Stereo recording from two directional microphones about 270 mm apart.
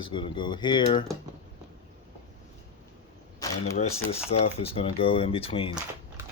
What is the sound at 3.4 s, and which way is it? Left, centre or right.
Camera, centre.